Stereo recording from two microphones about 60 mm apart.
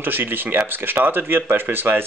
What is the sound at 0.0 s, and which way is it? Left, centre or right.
Speech, right.